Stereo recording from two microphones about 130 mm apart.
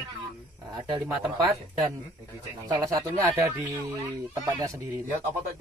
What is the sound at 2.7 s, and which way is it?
Speech, 30° right (ahead or behind).